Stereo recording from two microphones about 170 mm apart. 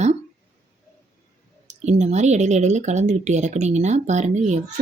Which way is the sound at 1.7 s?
40° right (ahead or behind).